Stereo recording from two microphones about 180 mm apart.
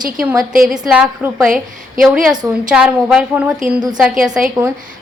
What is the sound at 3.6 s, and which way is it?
Speech, 45° right (ahead or behind).